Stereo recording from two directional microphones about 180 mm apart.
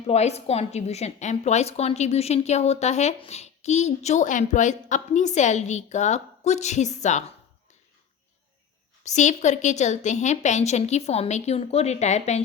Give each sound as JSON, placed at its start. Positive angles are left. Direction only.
{"t": 0.0, "sound": "a woman's voice", "side_deg": 35}
{"t": 9.0, "sound": "a woman's voice", "side_deg": 40}